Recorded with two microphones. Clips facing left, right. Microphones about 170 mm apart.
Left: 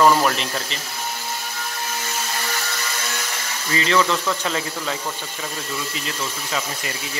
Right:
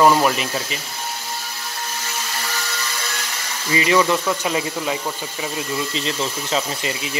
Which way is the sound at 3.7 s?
15° right (ahead or behind).